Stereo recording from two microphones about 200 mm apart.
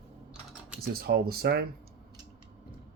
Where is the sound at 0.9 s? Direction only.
50° right (ahead or behind).